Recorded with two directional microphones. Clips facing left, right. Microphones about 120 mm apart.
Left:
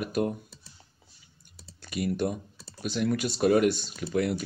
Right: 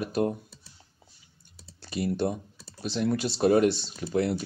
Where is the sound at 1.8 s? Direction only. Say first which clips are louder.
Right 1 dB; 30° right (ahead or behind).